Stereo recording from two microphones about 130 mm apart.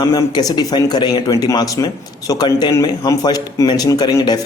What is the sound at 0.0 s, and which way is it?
Speech, 30° left (ahead or behind).